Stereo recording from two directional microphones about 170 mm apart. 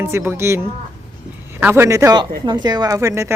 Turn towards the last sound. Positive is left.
turn(degrees=-15)  # may be behind; listen again after turning